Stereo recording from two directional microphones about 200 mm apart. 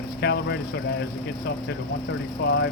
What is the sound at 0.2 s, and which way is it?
Speech, 50° left (ahead or behind).